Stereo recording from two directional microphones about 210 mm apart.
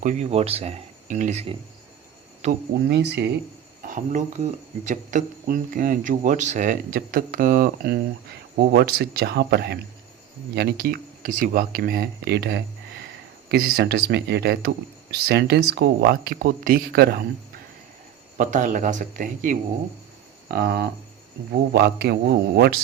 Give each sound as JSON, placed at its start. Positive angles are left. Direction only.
{"t": 0.0, "sound": "speech", "side_deg": -35}
{"t": 2.9, "sound": "speech", "side_deg": -55}
{"t": 3.8, "sound": "speech", "side_deg": -35}
{"t": 18.3, "sound": "speech", "side_deg": -35}